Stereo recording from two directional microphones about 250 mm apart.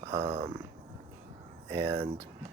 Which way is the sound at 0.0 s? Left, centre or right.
Right.